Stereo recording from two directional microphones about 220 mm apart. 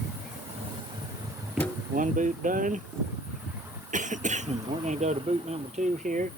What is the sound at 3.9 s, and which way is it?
Speech, 35° right (ahead or behind).